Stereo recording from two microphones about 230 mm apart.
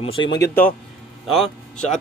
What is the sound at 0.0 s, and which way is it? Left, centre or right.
A man's voice, left.